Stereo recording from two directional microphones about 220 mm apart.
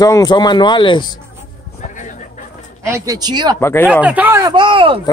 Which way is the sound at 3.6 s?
10° left (ahead or behind).